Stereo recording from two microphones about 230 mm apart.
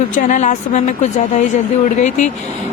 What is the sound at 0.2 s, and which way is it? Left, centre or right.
A woman's voice, left.